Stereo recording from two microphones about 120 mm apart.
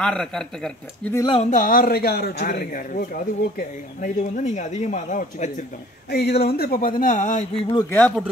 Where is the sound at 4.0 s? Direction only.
90° left.